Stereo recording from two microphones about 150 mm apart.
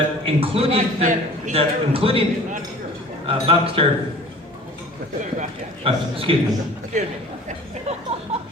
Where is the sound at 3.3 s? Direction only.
40° right (ahead or behind).